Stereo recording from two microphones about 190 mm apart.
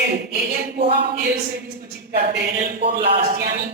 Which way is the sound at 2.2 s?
50° right (ahead or behind).